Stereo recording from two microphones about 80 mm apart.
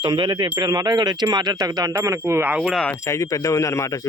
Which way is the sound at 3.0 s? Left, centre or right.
Left.